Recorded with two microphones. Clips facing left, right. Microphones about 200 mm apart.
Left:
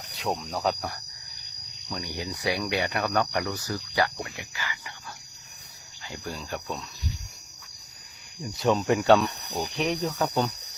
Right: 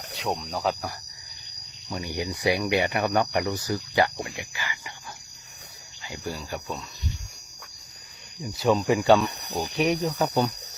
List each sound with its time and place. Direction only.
0.2 s speech: centre (ahead or behind)
1.9 s speech: 15° right (ahead or behind)
6.1 s speech: 10° right (ahead or behind)
8.4 s speech: 5° right (ahead or behind)